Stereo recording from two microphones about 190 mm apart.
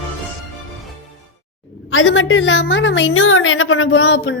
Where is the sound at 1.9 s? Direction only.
90° left.